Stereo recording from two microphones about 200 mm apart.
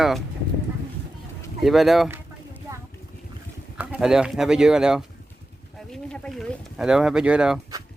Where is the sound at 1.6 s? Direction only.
Centre (ahead or behind).